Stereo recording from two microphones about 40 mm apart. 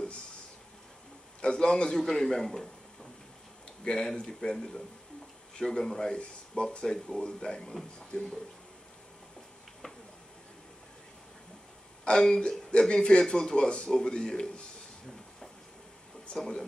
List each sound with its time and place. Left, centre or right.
1.4 s a man's voice: left
12.0 s speech: left